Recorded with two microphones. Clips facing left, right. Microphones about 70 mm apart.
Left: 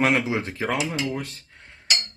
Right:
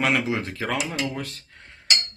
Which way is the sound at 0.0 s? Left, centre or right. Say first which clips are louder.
Left 1 dB; left.